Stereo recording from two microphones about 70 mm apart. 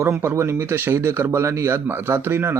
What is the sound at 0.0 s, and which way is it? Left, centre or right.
Speech, right.